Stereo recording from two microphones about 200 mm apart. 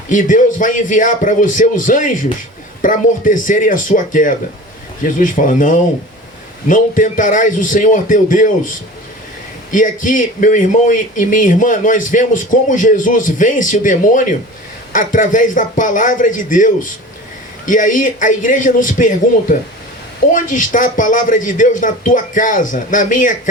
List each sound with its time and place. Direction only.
0.1 s a man's voice: 40° left (ahead or behind)
9.7 s a man's voice: 40° left (ahead or behind)